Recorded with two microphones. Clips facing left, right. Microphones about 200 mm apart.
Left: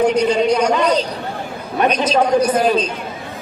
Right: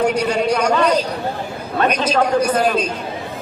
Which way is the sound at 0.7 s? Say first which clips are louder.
Even; 15° left (ahead or behind).